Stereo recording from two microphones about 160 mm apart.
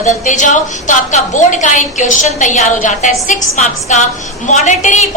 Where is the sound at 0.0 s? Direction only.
50° left (ahead or behind).